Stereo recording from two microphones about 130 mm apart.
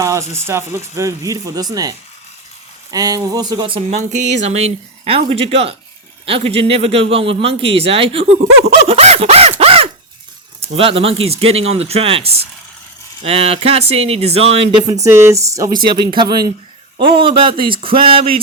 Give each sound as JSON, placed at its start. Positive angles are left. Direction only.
{"t": 0.0, "sound": "a sound", "side_deg": -25}
{"t": 0.3, "sound": "speech", "side_deg": -20}
{"t": 3.9, "sound": "a man's voice", "side_deg": -60}
{"t": 8.9, "sound": "a sound", "side_deg": -50}
{"t": 10.8, "sound": "a man's voice", "side_deg": -45}
{"t": 14.8, "sound": "a man's voice", "side_deg": -25}